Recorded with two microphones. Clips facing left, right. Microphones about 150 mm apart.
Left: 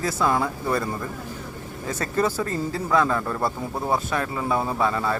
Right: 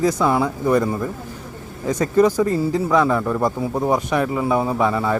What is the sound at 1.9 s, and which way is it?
A man's voice, 15° right (ahead or behind).